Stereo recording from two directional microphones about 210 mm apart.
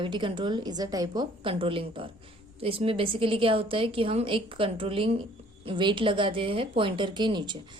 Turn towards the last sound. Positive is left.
turn(degrees=-20)  # may be behind; listen again after turning